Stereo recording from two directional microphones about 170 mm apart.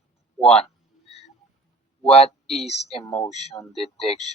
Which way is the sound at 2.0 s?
35° left (ahead or behind).